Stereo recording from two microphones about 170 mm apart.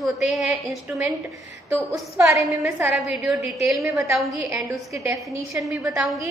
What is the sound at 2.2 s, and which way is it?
A woman's voice, 15° right (ahead or behind).